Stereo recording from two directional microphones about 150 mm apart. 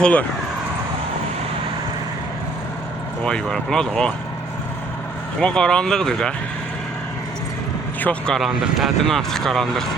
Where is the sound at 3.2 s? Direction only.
5° left (ahead or behind).